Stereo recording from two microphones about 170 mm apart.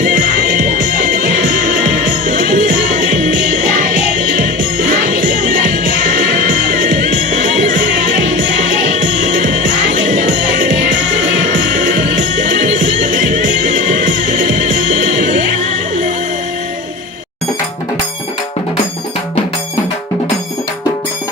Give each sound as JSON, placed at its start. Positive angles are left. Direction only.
{"t": 0.0, "sound": "music", "side_deg": -50}
{"t": 8.8, "sound": "music", "side_deg": -45}